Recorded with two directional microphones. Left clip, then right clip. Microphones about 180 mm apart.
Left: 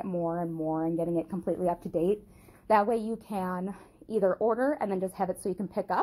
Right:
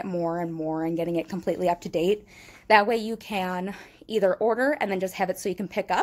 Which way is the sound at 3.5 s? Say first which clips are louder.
Right 4 dB; 20° right (ahead or behind).